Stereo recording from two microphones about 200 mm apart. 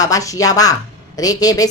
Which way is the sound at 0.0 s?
15° left (ahead or behind).